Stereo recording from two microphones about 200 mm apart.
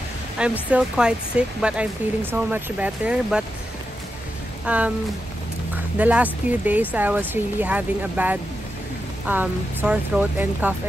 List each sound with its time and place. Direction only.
0.4 s speech: 5° right (ahead or behind)
4.6 s speech: 5° right (ahead or behind)
5.9 s speech: 5° right (ahead or behind)